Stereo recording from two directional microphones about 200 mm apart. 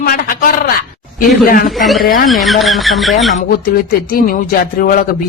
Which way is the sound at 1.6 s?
Centre (ahead or behind).